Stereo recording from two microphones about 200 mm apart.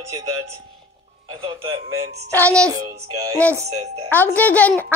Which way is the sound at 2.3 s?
5° left (ahead or behind).